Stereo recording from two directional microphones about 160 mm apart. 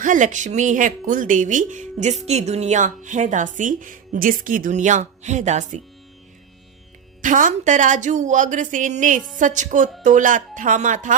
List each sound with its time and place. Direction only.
0.0 s a woman's voice: 55° right (ahead or behind)
7.2 s a woman's voice: 55° right (ahead or behind)